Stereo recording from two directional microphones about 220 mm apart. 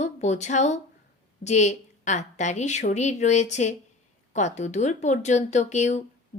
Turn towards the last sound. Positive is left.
turn(degrees=30)  # may be behind; listen again after turning